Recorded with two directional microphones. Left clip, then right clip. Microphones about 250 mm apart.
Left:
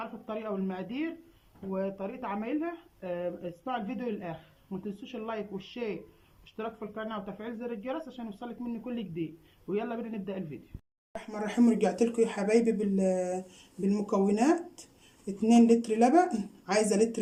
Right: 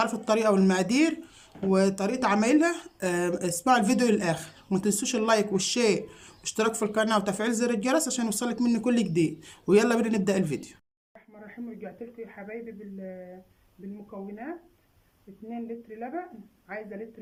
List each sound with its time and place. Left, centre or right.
0.0 s speech: right
11.3 s speech: centre